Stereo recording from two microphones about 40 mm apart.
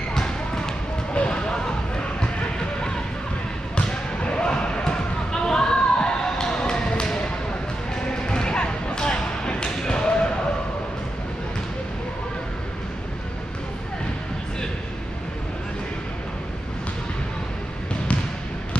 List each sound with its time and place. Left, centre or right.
0.1 s basketball bounce: centre
1.1 s a sound: left
3.7 s basketball bounce: left
7.9 s music: centre